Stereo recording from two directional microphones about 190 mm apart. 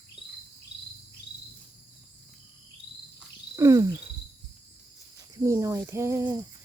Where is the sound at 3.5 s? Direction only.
15° right (ahead or behind).